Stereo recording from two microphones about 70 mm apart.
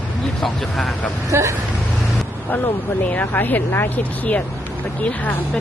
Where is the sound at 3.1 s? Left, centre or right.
Left.